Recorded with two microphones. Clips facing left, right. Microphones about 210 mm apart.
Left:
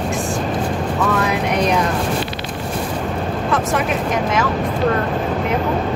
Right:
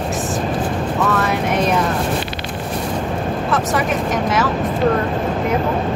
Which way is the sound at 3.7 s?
Centre (ahead or behind).